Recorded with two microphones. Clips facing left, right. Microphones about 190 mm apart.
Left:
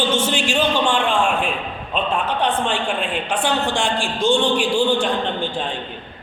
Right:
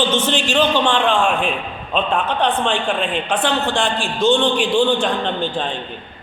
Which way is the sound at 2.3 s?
10° left (ahead or behind).